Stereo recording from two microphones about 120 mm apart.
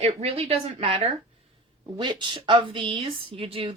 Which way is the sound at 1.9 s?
40° right (ahead or behind).